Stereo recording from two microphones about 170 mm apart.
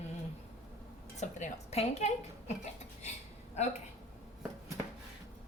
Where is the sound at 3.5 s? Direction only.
40° left (ahead or behind).